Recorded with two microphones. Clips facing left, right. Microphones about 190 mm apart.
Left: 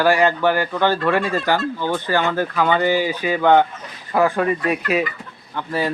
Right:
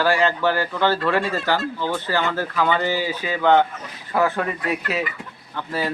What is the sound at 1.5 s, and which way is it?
Speech, 50° left (ahead or behind).